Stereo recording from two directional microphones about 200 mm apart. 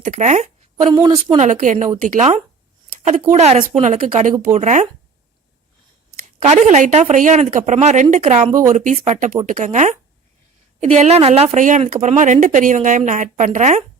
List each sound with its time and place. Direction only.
0.0 s a sound: 35° right (ahead or behind)
0.9 s speech: 25° right (ahead or behind)
6.4 s speech: 35° right (ahead or behind)